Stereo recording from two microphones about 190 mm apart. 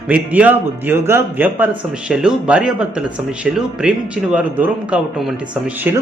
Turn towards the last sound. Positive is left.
turn(degrees=-10)  # may be behind; listen again after turning